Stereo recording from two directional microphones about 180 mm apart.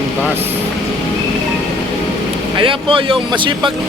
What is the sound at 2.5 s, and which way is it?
Speech, 30° right (ahead or behind).